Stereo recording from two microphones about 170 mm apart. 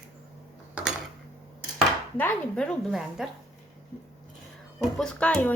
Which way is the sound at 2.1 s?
10° left (ahead or behind).